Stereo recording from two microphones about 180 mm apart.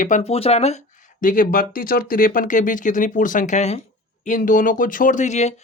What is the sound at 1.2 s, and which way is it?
Speech, 50° left (ahead or behind).